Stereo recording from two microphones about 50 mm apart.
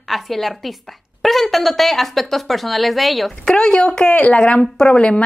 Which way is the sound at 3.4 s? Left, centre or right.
Centre.